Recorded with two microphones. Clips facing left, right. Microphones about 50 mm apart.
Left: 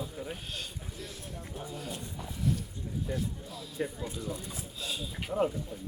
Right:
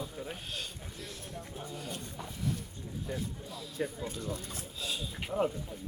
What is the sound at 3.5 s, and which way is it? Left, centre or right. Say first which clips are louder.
Music: left 1 dB; centre.